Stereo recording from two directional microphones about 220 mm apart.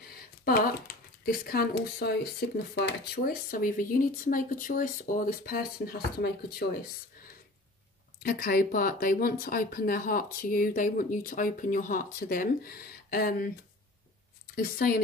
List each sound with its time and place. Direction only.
0.1 s a sound: 40° left (ahead or behind)
1.2 s speech: 45° left (ahead or behind)
8.2 s speech: 40° left (ahead or behind)
14.5 s speech: 45° left (ahead or behind)